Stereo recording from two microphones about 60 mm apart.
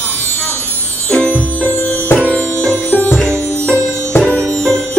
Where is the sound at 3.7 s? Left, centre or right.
Right.